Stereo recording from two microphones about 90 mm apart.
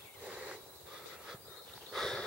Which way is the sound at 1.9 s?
5° left (ahead or behind).